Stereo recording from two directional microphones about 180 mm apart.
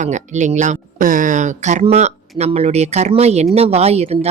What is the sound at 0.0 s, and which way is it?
Speech, 40° right (ahead or behind).